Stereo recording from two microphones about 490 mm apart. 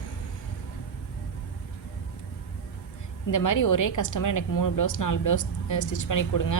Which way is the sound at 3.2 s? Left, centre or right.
Left.